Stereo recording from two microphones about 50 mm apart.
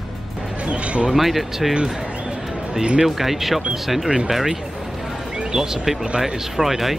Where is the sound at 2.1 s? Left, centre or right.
Right.